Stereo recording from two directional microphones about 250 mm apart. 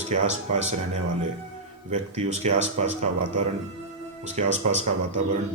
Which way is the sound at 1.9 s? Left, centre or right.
Right.